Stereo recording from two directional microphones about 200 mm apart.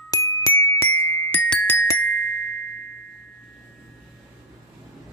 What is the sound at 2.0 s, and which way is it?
Glockenspiel, 90° left.